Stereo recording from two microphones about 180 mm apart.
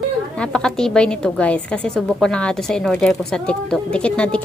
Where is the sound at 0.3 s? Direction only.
5° left (ahead or behind).